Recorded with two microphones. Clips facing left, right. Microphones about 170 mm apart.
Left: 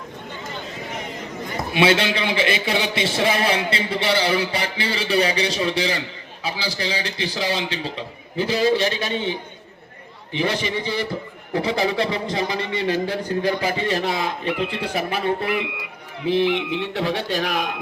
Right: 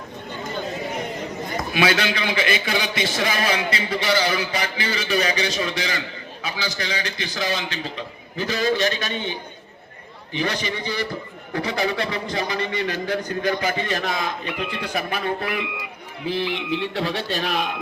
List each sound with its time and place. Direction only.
1.7 s a man's voice: 25° left (ahead or behind)
16.5 s speech: 60° left (ahead or behind)
16.9 s speech: 15° left (ahead or behind)